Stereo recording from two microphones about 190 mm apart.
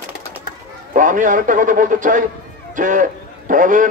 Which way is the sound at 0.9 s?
40° right (ahead or behind).